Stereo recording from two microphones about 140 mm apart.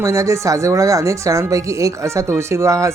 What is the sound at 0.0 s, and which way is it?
Speech, 20° right (ahead or behind).